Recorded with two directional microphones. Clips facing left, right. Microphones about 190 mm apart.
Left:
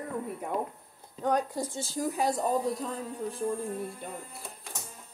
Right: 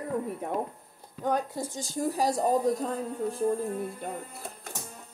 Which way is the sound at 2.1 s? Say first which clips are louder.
Right 3 dB; 40° right (ahead or behind).